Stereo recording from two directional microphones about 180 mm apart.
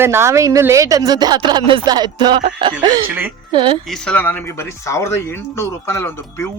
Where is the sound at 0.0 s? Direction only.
15° right (ahead or behind).